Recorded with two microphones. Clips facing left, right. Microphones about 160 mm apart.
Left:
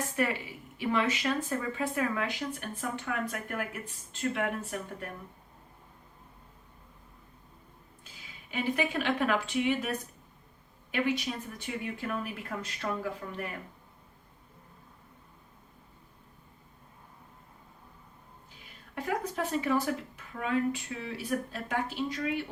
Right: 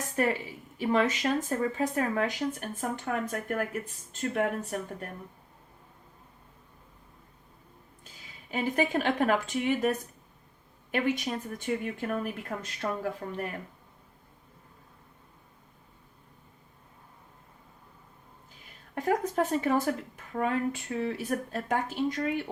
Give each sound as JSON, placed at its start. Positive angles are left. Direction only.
{"t": 0.2, "sound": "speech", "side_deg": -40}
{"t": 8.0, "sound": "speech", "side_deg": -45}
{"t": 10.9, "sound": "speech", "side_deg": -50}
{"t": 18.9, "sound": "speech", "side_deg": -45}